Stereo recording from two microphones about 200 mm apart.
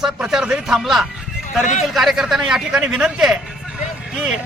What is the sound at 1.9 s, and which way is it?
Speech, centre (ahead or behind).